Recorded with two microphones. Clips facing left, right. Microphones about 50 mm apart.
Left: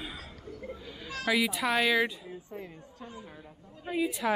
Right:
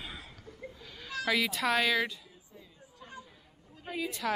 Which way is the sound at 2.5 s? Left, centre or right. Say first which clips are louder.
Left 11 dB; left.